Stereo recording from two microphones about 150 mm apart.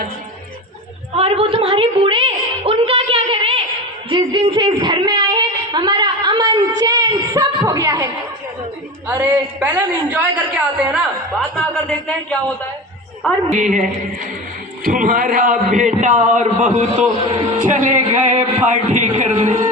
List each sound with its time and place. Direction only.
1.1 s a sound: 40° right (ahead or behind); by 8.0 s 20° right (ahead or behind)
9.0 s a woman's voice: 15° right (ahead or behind)
11.5 s speech: 5° left (ahead or behind)
13.6 s a man's voice: 55° right (ahead or behind)